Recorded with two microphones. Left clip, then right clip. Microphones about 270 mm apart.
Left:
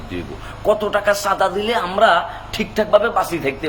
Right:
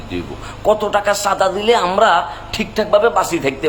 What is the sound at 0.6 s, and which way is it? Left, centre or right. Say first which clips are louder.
A man's voice: right 2 dB; centre.